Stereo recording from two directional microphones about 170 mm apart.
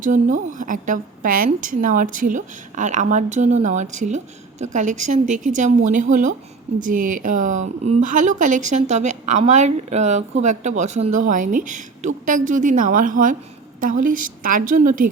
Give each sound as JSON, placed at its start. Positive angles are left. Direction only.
{"t": 0.0, "sound": "a woman's voice", "side_deg": -50}